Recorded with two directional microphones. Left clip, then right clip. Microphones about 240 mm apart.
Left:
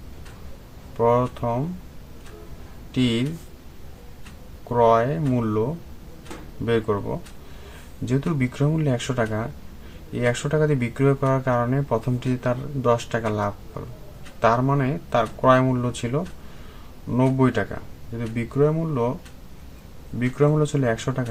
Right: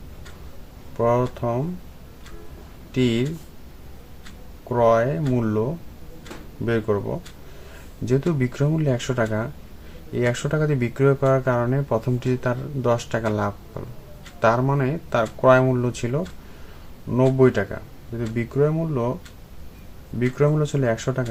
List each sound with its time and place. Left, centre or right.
0.9 s speech: centre
2.9 s speech: centre
4.7 s speech: centre
6.7 s speech: centre
8.0 s speech: centre
20.1 s speech: centre